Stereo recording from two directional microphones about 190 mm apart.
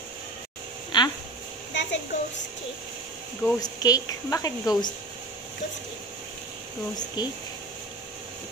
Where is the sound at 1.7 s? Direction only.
70° left (ahead or behind).